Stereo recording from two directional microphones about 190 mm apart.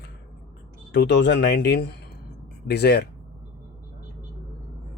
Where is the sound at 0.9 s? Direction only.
65° left (ahead or behind).